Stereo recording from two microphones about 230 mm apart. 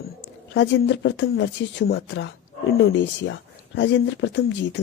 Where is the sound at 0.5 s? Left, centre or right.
Left.